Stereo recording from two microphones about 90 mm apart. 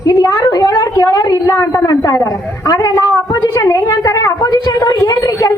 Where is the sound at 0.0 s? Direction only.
45° left (ahead or behind).